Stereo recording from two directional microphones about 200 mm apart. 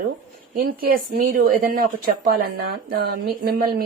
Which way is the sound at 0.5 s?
45° right (ahead or behind).